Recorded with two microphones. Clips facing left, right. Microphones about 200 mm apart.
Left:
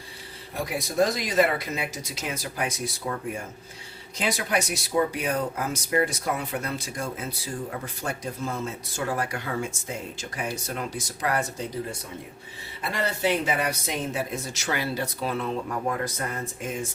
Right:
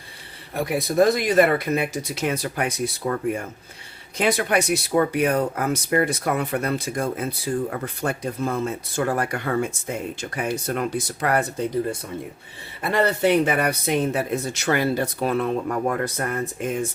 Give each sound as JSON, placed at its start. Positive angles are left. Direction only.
{"t": 0.5, "sound": "speech", "side_deg": -60}
{"t": 12.8, "sound": "speech", "side_deg": -60}